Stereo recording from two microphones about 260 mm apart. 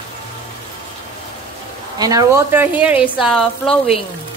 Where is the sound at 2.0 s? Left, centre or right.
Centre.